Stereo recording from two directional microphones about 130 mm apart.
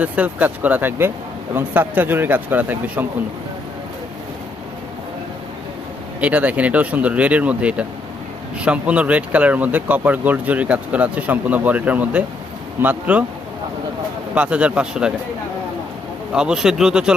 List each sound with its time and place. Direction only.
0.0 s speech: 10° right (ahead or behind)
6.1 s speech: 10° right (ahead or behind)
14.3 s speech: 10° right (ahead or behind)
16.3 s speech: 5° right (ahead or behind)